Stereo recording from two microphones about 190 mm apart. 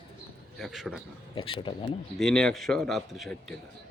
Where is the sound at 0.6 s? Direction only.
Centre (ahead or behind).